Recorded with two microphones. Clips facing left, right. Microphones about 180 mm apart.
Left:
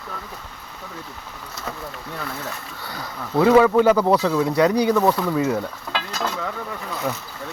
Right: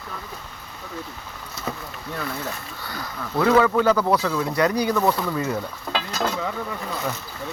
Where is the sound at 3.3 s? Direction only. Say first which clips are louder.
Left 4 dB; 15° left (ahead or behind).